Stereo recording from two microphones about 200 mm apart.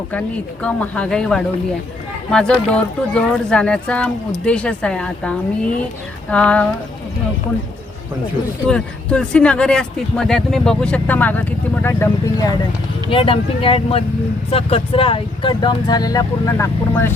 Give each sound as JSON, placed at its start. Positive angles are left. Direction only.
{"t": 0.1, "sound": "speech", "side_deg": 5}
{"t": 8.6, "sound": "speech", "side_deg": 5}
{"t": 13.1, "sound": "speech", "side_deg": 25}